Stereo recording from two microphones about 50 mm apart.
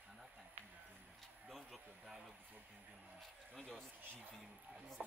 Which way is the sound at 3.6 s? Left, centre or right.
Centre.